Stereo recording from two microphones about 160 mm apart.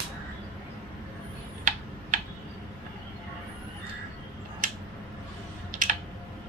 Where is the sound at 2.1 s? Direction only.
55° right (ahead or behind).